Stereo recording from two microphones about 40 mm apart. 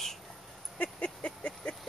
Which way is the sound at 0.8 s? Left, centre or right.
Left.